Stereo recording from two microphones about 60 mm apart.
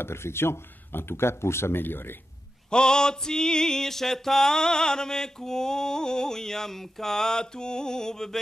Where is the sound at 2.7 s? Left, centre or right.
Centre.